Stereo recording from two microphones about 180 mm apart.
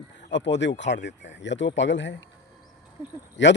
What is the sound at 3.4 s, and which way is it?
Speech, 90° left.